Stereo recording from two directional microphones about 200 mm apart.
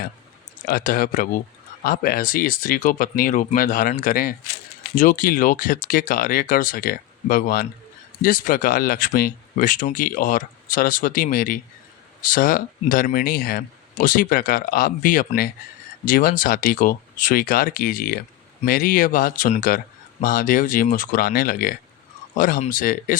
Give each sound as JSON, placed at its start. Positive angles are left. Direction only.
{"t": 0.7, "sound": "speech", "side_deg": 45}